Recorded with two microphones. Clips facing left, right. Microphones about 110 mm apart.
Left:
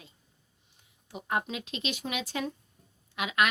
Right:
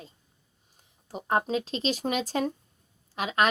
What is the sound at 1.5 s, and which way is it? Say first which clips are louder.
A woman's voice: right 7 dB; 35° right (ahead or behind).